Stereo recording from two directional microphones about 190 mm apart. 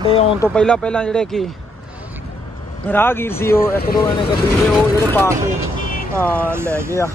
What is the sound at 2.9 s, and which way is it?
Speech, 10° left (ahead or behind).